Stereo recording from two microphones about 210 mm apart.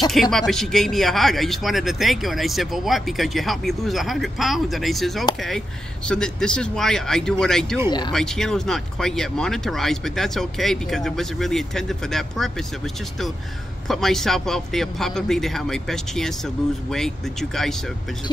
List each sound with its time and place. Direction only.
0.1 s speech: centre (ahead or behind)